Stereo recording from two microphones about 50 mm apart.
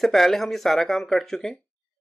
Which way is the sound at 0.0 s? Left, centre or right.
Centre.